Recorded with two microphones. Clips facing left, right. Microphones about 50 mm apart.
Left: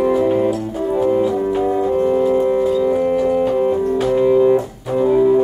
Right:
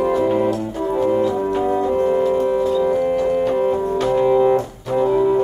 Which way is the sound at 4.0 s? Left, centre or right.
Centre.